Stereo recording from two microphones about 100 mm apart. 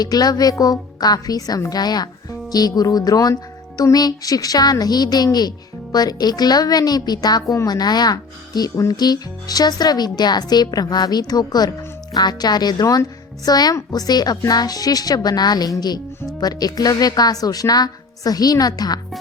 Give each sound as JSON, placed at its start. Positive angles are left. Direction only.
{"t": 0.0, "sound": "a woman's voice", "side_deg": 40}